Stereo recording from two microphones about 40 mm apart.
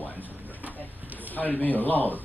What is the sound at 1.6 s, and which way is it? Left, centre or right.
Speech, left.